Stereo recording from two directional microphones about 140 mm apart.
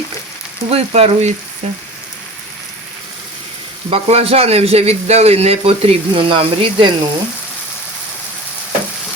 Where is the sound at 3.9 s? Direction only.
45° right (ahead or behind).